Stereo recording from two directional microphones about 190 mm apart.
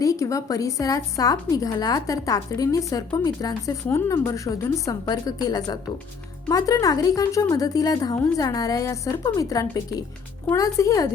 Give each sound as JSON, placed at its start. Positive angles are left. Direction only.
{"t": 0.0, "sound": "a woman's voice", "side_deg": 15}